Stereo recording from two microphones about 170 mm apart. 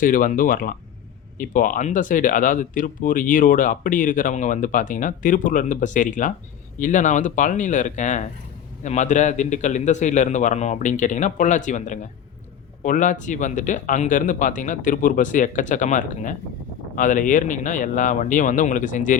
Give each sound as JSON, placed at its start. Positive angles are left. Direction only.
{"t": 0.0, "sound": "speech", "side_deg": 55}